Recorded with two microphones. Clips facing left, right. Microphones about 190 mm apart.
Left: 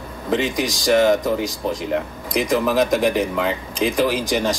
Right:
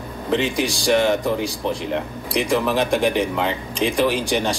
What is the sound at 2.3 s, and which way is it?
A man's voice, centre (ahead or behind).